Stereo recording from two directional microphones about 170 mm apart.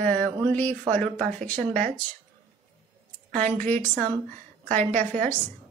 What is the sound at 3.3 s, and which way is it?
Speech, 10° left (ahead or behind).